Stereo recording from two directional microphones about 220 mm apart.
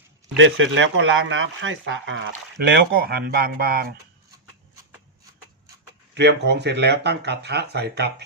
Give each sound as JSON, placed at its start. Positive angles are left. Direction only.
{"t": 0.3, "sound": "speech", "side_deg": -60}
{"t": 2.7, "sound": "speech", "side_deg": -45}
{"t": 6.1, "sound": "speech", "side_deg": -50}